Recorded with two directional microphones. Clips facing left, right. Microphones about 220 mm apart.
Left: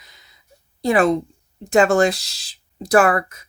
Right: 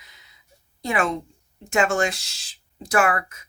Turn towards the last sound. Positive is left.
turn(degrees=35)  # may be behind; listen again after turning